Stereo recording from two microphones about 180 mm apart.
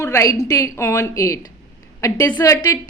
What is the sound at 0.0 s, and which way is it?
A woman's voice, 15° left (ahead or behind).